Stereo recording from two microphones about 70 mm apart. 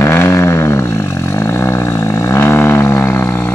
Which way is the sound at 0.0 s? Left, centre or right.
Left.